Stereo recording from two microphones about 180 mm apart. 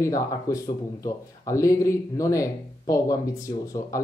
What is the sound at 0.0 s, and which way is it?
Speech, 20° left (ahead or behind).